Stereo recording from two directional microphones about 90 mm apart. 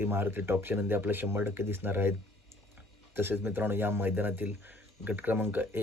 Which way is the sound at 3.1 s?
25° right (ahead or behind).